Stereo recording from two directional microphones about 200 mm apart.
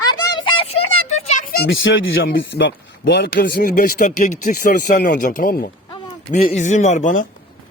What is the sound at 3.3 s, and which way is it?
Speech, 45° left (ahead or behind).